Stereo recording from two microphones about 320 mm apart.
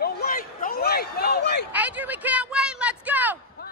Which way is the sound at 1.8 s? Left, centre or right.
Centre.